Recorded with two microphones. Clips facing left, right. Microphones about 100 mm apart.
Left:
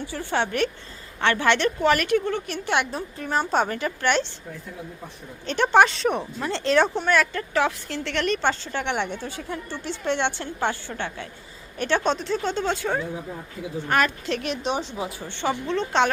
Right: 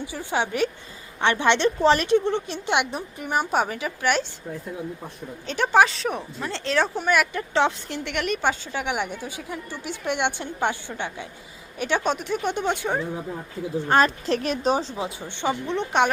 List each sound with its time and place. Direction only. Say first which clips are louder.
0.0 s a woman's voice: even; 15° right (ahead or behind)
5.5 s a woman's voice: left 1 dB; centre (ahead or behind)
13.8 s speech: right 3 dB; 30° right (ahead or behind)
15.0 s a woman's voice: even; 15° right (ahead or behind)